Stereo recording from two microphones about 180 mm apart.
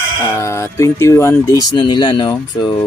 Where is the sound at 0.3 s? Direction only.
15° left (ahead or behind).